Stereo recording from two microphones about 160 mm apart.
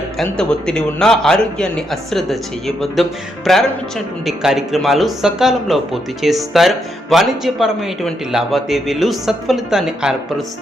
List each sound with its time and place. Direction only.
0.2 s a man's voice: 5° left (ahead or behind)